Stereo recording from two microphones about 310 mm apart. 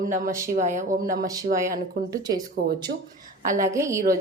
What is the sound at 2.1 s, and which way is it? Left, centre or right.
Speech, centre.